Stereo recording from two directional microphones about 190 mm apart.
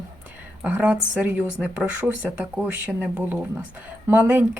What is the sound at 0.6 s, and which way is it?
A woman's voice, 5° right (ahead or behind).